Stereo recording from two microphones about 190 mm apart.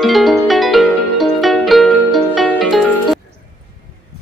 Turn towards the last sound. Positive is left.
turn(degrees=0)  # may be behind; listen again after turning